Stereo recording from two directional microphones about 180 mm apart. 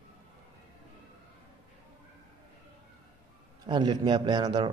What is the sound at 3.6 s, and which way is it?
A man's voice, 25° right (ahead or behind).